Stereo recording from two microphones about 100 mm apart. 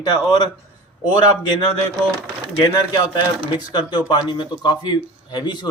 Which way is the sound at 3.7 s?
45° left (ahead or behind).